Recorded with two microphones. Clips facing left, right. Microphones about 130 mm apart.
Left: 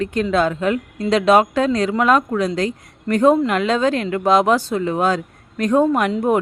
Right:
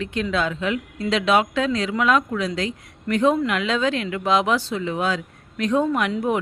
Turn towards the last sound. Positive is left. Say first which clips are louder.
# left 5 dB
turn(degrees=45)  # may be behind; listen again after turning